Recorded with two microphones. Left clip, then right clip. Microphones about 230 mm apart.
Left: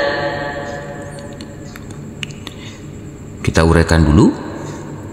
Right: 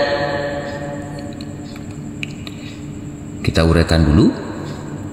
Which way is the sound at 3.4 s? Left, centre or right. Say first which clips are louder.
Left 3 dB; left.